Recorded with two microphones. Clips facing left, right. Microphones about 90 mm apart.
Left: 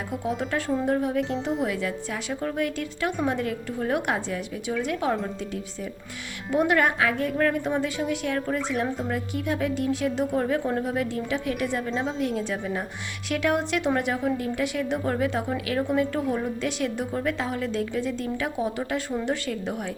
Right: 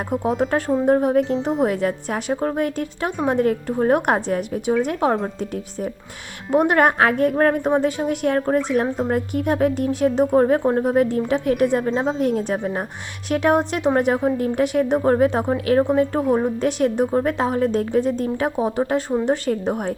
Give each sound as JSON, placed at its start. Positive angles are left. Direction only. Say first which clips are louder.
{"t": 0.1, "sound": "a woman's voice", "louder": "right 8 dB", "side_deg": -45}
{"t": 6.5, "sound": "a woman's voice", "louder": "right 6 dB", "side_deg": -45}